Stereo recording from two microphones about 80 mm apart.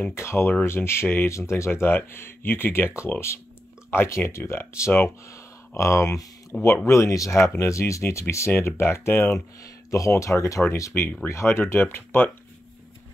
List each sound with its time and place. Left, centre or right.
0.1 s speech: left
9.8 s speech: left